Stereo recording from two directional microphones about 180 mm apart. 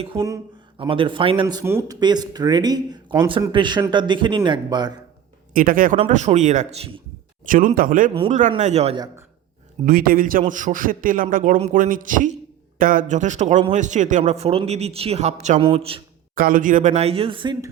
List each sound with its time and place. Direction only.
0.8 s speech: 30° right (ahead or behind)
5.5 s a man's voice: 50° right (ahead or behind)
6.0 s speech: 40° right (ahead or behind)
7.4 s a man's voice: 50° right (ahead or behind)
9.8 s a man's voice: 55° right (ahead or behind); by 16.0 s 30° right (ahead or behind)
16.3 s speech: 50° right (ahead or behind); by 17.7 s 25° right (ahead or behind)